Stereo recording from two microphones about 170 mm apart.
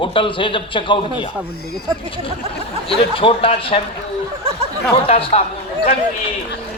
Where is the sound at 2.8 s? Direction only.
30° left (ahead or behind).